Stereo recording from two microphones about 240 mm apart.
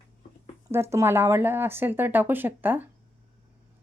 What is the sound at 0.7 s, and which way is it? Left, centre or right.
Speech, centre.